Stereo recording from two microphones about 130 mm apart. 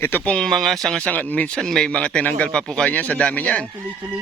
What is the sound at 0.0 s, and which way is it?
Speech, 15° left (ahead or behind).